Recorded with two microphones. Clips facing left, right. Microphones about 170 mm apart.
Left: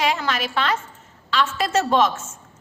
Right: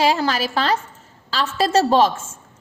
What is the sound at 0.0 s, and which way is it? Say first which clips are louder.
A woman's voice: right 4 dB; 35° right (ahead or behind).